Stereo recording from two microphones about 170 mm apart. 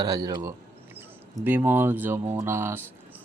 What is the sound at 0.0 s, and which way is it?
Speech, 20° right (ahead or behind).